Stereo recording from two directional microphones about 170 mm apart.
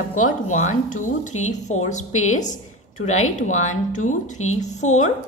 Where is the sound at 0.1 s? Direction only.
45° left (ahead or behind).